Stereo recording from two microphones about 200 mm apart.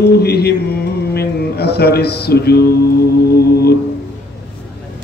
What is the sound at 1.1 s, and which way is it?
Music, 55° left (ahead or behind).